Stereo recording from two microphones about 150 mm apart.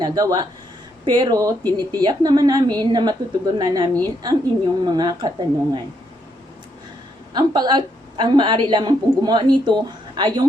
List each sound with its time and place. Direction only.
0.0 s a woman's voice: 25° right (ahead or behind)
7.3 s a woman's voice: 30° right (ahead or behind)